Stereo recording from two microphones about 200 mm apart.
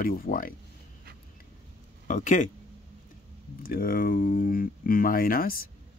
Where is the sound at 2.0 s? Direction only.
40° left (ahead or behind).